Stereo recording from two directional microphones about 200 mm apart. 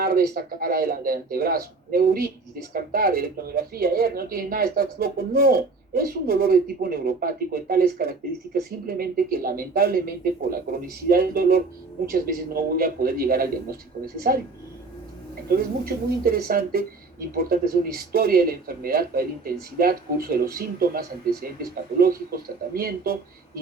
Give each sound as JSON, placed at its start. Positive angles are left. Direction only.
{"t": 0.0, "sound": "speech", "side_deg": -50}
{"t": 15.4, "sound": "speech", "side_deg": -50}